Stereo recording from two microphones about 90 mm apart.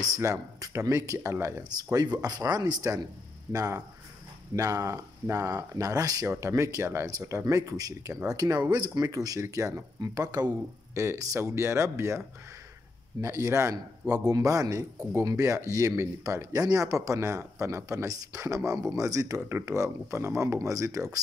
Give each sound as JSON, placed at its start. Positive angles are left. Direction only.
{"t": 0.0, "sound": "speech", "side_deg": -40}
{"t": 1.6, "sound": "speech", "side_deg": -50}
{"t": 7.1, "sound": "speech", "side_deg": -40}
{"t": 11.0, "sound": "speech", "side_deg": -30}
{"t": 13.2, "sound": "speech", "side_deg": -30}